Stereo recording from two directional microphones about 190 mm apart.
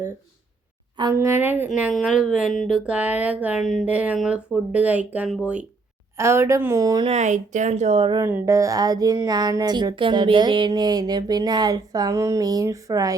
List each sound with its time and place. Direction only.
0.9 s speech: 20° right (ahead or behind)
7.1 s speech: 40° right (ahead or behind)
8.2 s speech: 15° right (ahead or behind)